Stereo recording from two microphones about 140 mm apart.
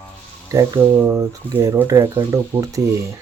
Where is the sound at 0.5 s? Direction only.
25° right (ahead or behind).